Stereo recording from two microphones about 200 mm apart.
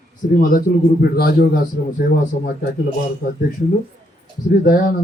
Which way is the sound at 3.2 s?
45° left (ahead or behind).